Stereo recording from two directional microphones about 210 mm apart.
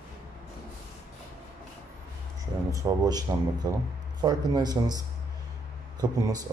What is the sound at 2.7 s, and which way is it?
Speech, 15° right (ahead or behind).